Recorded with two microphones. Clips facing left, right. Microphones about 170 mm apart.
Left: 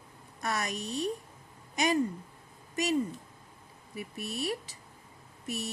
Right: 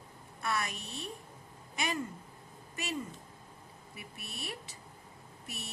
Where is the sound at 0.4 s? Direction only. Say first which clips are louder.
Left 2 dB; 40° left (ahead or behind).